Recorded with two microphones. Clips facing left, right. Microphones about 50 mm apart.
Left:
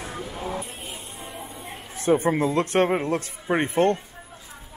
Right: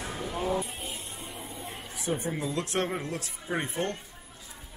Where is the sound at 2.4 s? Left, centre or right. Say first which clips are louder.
Left 6 dB; left.